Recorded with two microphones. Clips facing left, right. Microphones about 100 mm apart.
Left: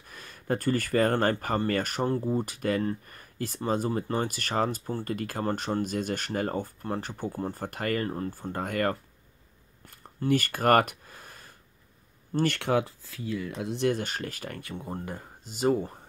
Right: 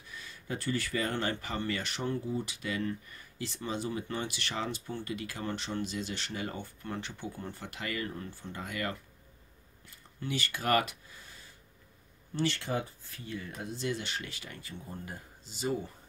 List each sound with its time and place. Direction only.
0.0 s speech: 50° left (ahead or behind); by 13.8 s 90° left
13.8 s speech: 50° left (ahead or behind)